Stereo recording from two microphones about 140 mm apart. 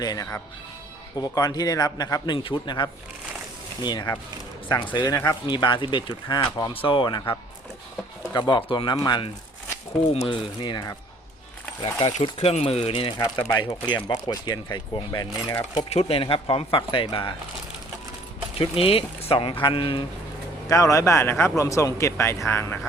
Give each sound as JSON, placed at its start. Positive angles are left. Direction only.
{"t": 0.0, "sound": "speech", "side_deg": 25}
{"t": 5.0, "sound": "speech", "side_deg": 20}
{"t": 5.5, "sound": "speech", "side_deg": 35}
{"t": 11.8, "sound": "speech", "side_deg": 45}
{"t": 15.9, "sound": "speech", "side_deg": 45}
{"t": 18.5, "sound": "speech", "side_deg": 40}
{"t": 20.7, "sound": "speech", "side_deg": 25}